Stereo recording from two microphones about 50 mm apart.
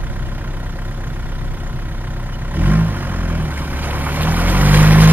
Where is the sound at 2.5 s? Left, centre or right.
Right.